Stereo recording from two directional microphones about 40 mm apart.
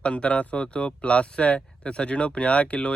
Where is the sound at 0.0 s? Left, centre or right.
Left.